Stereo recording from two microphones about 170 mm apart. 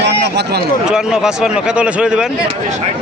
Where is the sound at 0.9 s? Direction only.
5° right (ahead or behind).